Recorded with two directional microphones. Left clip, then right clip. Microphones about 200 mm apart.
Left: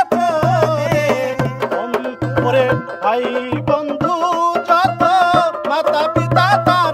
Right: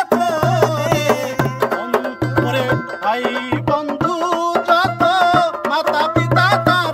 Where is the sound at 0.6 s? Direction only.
15° right (ahead or behind).